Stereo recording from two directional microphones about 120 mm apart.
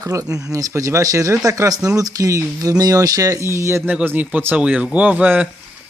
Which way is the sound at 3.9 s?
10° right (ahead or behind).